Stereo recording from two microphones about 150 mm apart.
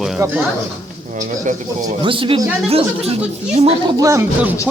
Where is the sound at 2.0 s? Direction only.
35° right (ahead or behind).